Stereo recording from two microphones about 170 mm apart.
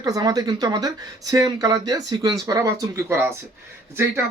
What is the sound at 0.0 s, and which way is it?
Speech, 20° right (ahead or behind).